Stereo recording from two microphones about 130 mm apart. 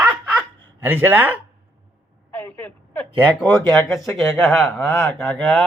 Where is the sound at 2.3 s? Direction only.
10° left (ahead or behind).